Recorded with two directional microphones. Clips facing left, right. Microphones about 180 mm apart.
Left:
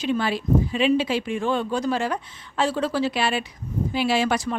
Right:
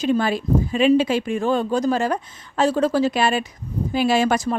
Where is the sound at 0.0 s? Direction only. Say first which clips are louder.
Right 4 dB; 45° right (ahead or behind).